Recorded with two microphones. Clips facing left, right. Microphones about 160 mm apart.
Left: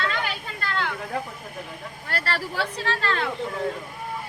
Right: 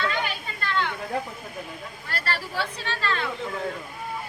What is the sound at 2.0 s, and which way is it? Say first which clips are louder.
Speech: left 2 dB; 70° left (ahead or behind).